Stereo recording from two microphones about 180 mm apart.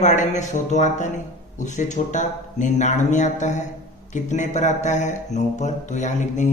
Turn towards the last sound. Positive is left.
turn(degrees=45)  # may be behind; listen again after turning